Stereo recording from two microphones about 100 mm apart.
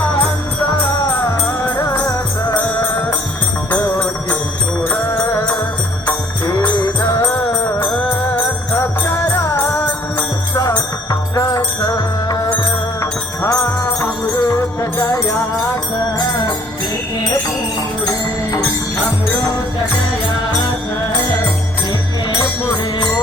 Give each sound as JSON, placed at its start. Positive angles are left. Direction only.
{"t": 1.5, "sound": "music", "side_deg": 35}
{"t": 2.6, "sound": "music", "side_deg": 15}
{"t": 6.7, "sound": "music", "side_deg": 15}
{"t": 7.1, "sound": "music", "side_deg": 30}
{"t": 10.5, "sound": "music", "side_deg": 40}
{"t": 23.0, "sound": "music", "side_deg": 45}